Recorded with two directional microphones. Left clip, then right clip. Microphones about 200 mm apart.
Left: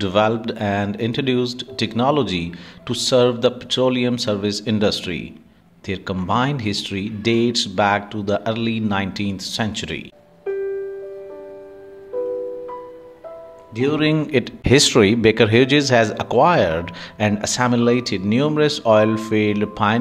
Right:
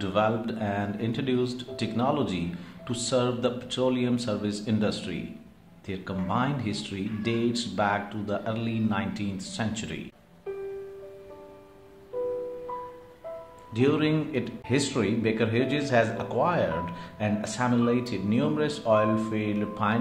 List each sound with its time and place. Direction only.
0.0 s speech: 40° left (ahead or behind)
13.9 s speech: 35° left (ahead or behind)